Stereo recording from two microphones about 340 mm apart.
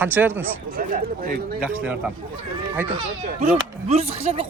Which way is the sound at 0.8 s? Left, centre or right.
Right.